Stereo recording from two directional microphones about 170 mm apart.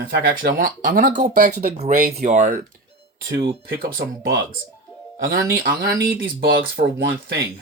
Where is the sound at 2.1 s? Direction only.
40° right (ahead or behind).